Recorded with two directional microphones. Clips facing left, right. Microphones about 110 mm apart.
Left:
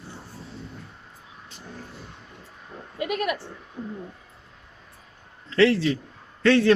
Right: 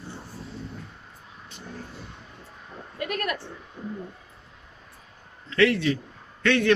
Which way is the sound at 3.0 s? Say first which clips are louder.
Left 3 dB; 15° left (ahead or behind).